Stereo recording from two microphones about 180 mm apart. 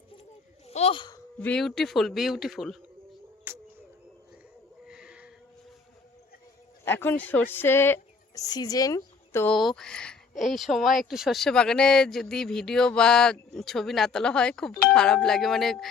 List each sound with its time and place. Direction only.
0.7 s speech: 35° left (ahead or behind)
1.4 s speech: 5° left (ahead or behind)
3.5 s music: 10° right (ahead or behind)
4.9 s cat: 5° right (ahead or behind)
6.8 s a woman's voice: 10° left (ahead or behind)
9.5 s speech: centre (ahead or behind)